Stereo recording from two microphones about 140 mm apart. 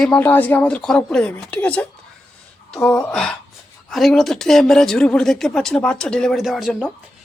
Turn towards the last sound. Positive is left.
turn(degrees=-5)  # may be behind; listen again after turning